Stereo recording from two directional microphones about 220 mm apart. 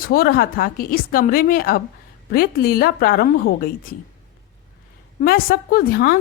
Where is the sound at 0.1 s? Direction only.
40° left (ahead or behind).